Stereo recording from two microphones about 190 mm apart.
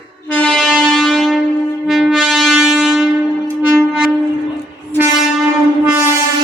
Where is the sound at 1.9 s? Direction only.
Centre (ahead or behind).